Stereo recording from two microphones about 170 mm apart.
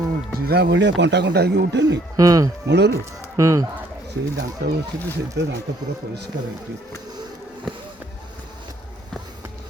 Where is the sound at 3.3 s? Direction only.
20° right (ahead or behind).